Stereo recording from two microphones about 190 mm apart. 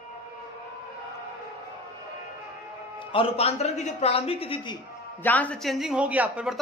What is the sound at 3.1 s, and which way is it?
A man's voice, 30° left (ahead or behind).